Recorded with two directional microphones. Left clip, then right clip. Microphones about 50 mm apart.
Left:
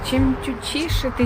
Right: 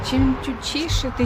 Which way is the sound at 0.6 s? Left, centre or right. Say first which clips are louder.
Left 1 dB; centre.